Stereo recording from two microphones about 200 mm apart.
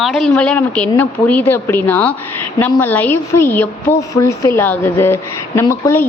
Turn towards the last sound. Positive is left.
turn(degrees=15)  # may be behind; listen again after turning